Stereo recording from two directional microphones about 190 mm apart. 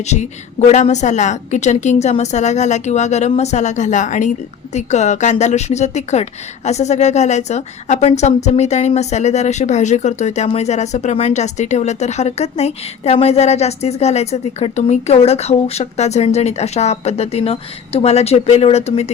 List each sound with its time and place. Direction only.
0.0 s a woman's voice: 35° left (ahead or behind)